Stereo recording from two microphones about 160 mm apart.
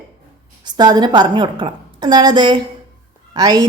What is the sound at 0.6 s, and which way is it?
A woman's voice, 25° right (ahead or behind).